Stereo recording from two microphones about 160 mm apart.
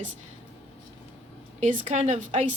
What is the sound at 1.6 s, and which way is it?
Speech, 50° right (ahead or behind).